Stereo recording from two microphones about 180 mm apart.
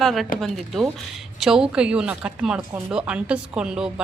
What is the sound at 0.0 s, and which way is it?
Speech, centre (ahead or behind).